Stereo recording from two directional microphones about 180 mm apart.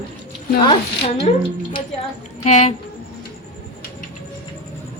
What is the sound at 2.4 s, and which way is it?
Speech, 35° left (ahead or behind).